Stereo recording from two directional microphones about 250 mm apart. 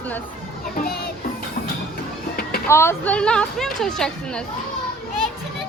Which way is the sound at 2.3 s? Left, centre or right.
Left.